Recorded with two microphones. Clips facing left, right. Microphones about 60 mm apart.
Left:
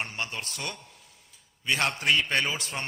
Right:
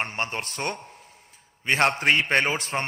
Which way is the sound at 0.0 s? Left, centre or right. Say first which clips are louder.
Right 5 dB; right.